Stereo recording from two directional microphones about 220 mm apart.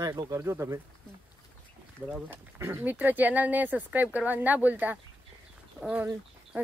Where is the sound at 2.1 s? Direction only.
10° right (ahead or behind).